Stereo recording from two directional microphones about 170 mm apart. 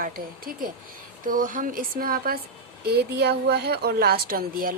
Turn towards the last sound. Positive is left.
turn(degrees=-60)  # may be behind; listen again after turning